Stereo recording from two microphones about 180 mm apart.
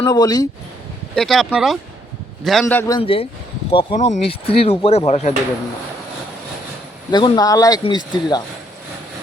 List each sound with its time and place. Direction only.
0.0 s speech: 20° left (ahead or behind)
1.1 s speech: centre (ahead or behind)
3.0 s speech: 30° left (ahead or behind)
7.1 s speech: 25° left (ahead or behind)